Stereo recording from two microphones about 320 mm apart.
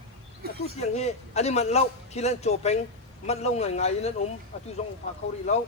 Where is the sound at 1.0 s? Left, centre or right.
Centre.